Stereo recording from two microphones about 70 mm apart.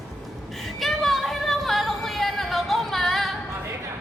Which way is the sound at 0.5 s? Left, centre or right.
Centre.